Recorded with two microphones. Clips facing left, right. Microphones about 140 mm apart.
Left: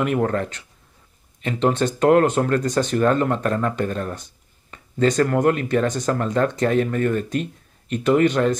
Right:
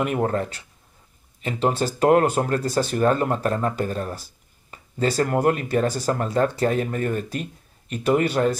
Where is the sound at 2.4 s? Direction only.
30° right (ahead or behind).